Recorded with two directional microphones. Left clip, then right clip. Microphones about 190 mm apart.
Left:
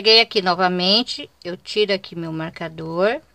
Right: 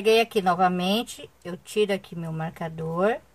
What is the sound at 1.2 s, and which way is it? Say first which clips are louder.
Speech: left 7 dB; 30° left (ahead or behind).